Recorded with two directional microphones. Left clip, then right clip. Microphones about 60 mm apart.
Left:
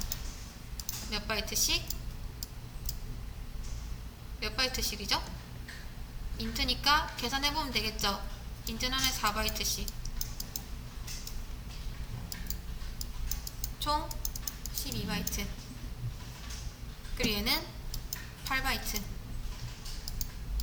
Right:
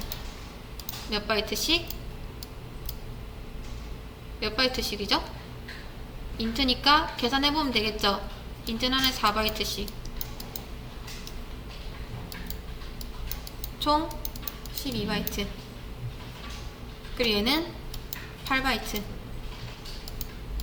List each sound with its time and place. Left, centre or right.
1.1 s a woman's voice: left
4.4 s a woman's voice: left
6.3 s a woman's voice: left
13.7 s a sound: left
14.8 s a woman's voice: left
17.2 s a woman's voice: left